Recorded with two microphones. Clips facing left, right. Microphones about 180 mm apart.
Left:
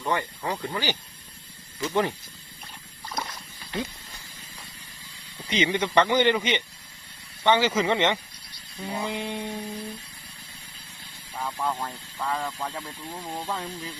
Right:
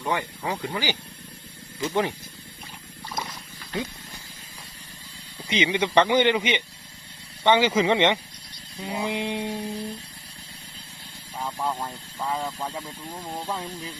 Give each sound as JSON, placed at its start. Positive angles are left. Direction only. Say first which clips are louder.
{"t": 0.0, "sound": "speech", "louder": "even", "side_deg": -10}
{"t": 3.1, "sound": "wild animals", "louder": "even", "side_deg": 0}
{"t": 5.5, "sound": "speech", "louder": "right 1 dB", "side_deg": -15}
{"t": 11.3, "sound": "speech", "louder": "even", "side_deg": -10}